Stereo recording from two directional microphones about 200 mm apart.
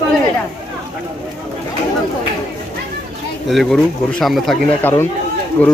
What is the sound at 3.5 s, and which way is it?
Speech, centre (ahead or behind).